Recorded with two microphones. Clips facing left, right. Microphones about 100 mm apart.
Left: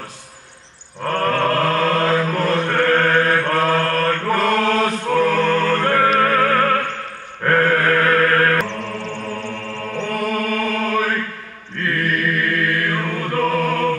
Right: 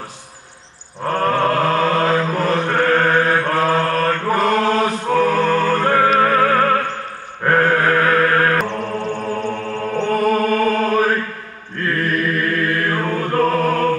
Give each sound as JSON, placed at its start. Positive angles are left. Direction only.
{"t": 1.0, "sound": "mantra", "side_deg": -10}
{"t": 2.3, "sound": "chant", "side_deg": -10}
{"t": 6.0, "sound": "music", "side_deg": -15}
{"t": 7.4, "sound": "chant", "side_deg": -15}
{"t": 9.0, "sound": "music", "side_deg": -15}
{"t": 10.0, "sound": "music", "side_deg": -35}
{"t": 11.7, "sound": "chant", "side_deg": -40}